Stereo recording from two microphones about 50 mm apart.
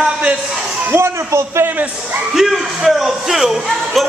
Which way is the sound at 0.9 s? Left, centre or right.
Right.